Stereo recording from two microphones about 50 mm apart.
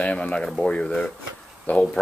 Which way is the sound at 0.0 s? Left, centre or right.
Left.